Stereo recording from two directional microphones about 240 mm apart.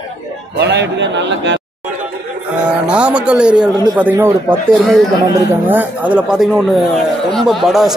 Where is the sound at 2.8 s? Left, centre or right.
Centre.